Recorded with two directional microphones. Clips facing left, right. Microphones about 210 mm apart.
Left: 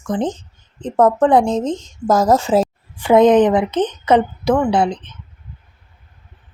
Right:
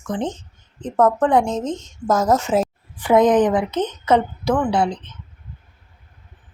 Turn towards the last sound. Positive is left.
turn(degrees=15)  # may be behind; listen again after turning